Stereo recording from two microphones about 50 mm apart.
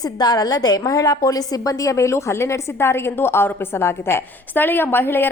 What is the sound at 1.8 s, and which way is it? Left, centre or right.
A woman's voice, left.